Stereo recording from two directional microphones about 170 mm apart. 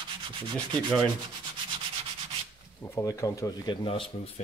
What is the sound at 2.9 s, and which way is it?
Speech, 20° left (ahead or behind).